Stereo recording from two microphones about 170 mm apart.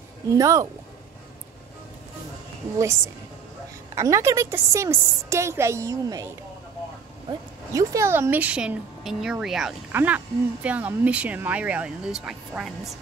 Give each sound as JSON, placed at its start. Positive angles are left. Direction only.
{"t": 0.3, "sound": "speech", "side_deg": -20}
{"t": 3.9, "sound": "speech", "side_deg": -15}
{"t": 7.2, "sound": "speech", "side_deg": -20}